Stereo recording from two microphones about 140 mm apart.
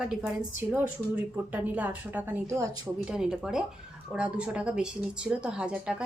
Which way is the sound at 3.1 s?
5° right (ahead or behind).